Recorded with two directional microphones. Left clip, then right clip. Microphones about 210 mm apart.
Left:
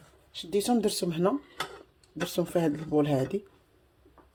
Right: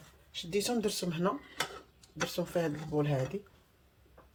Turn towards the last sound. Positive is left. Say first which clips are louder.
# left 6 dB
turn(degrees=55)  # may be behind; listen again after turning